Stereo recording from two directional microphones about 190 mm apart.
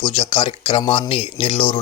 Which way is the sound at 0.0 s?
30° left (ahead or behind).